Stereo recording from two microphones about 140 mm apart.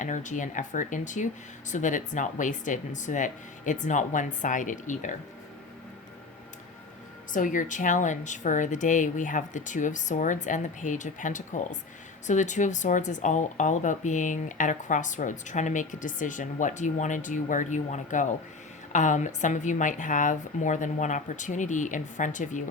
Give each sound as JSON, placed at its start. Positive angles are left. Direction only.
{"t": 0.0, "sound": "speech", "side_deg": 60}
{"t": 7.3, "sound": "speech", "side_deg": 70}